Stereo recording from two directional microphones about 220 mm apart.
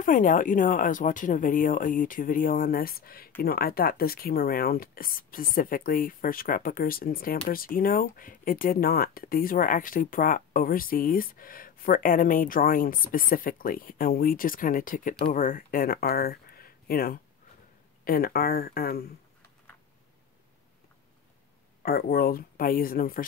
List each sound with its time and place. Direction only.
0.0 s speech: 35° left (ahead or behind)
21.8 s speech: 45° left (ahead or behind)